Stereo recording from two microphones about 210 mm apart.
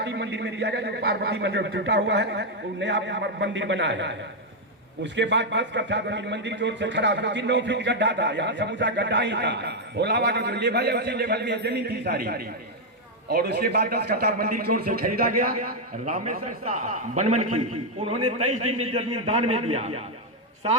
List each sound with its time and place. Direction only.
0.0 s a man's voice: 55° right (ahead or behind); by 17.4 s 35° right (ahead or behind)
18.4 s a man's voice: 90° right
18.9 s a man's voice: 25° right (ahead or behind)